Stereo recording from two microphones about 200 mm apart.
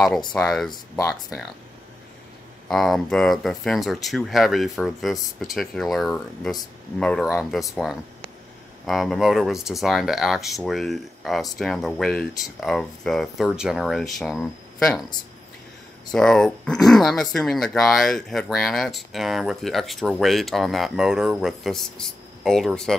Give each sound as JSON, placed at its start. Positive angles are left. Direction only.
{"t": 0.3, "sound": "speech", "side_deg": 5}
{"t": 2.7, "sound": "speech", "side_deg": 0}
{"t": 16.1, "sound": "speech", "side_deg": 5}